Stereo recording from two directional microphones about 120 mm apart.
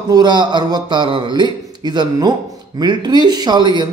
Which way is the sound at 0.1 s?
35° right (ahead or behind).